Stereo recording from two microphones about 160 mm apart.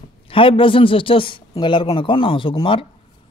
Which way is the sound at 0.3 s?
35° left (ahead or behind).